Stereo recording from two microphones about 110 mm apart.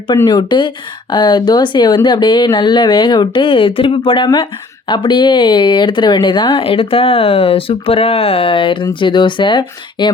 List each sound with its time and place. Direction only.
0.3 s speech: 40° left (ahead or behind)